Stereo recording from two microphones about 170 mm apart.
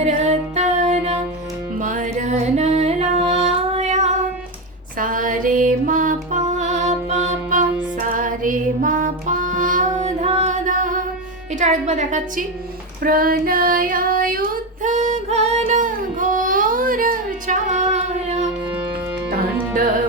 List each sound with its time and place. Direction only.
0.0 s music: 40° right (ahead or behind)
4.9 s music: 50° right (ahead or behind)
11.6 s a woman's voice: 45° right (ahead or behind)
13.0 s child singing: 60° right (ahead or behind); by 18.5 s 40° right (ahead or behind)